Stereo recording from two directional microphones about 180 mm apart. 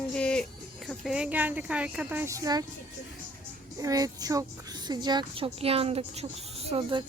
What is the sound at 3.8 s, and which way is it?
A child's voice, 20° right (ahead or behind).